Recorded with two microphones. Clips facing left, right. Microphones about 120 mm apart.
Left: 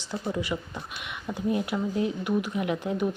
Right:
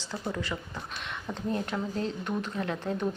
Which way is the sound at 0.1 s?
15° left (ahead or behind).